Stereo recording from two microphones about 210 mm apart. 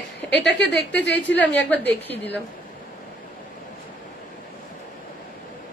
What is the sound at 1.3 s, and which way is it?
Speech, 10° left (ahead or behind).